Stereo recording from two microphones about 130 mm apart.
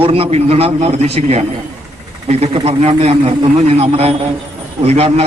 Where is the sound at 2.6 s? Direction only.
40° right (ahead or behind).